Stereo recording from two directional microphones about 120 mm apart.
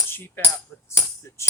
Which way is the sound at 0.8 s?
25° left (ahead or behind).